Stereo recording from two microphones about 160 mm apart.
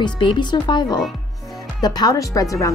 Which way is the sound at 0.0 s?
30° left (ahead or behind).